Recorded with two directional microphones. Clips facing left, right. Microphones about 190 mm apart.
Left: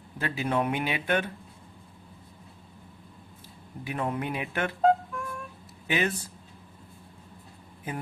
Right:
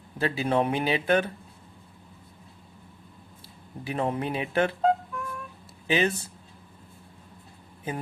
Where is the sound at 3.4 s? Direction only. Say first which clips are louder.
Right 1 dB; 30° right (ahead or behind).